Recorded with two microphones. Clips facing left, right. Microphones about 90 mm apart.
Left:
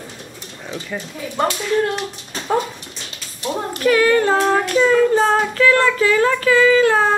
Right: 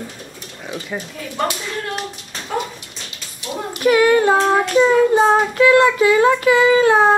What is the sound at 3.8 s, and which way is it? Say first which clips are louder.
Speech: right 2 dB; 15° right (ahead or behind).